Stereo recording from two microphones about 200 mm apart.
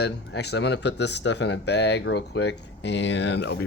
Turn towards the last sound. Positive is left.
turn(degrees=60)  # may be behind; listen again after turning